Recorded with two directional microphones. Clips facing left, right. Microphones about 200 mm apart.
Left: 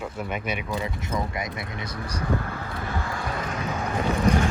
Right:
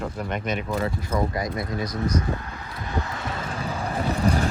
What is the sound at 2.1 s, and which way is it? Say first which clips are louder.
Speech: right 1 dB; 30° left (ahead or behind).